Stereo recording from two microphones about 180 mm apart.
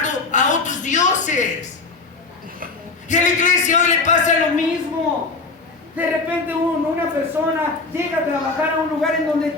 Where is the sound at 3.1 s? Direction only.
45° left (ahead or behind).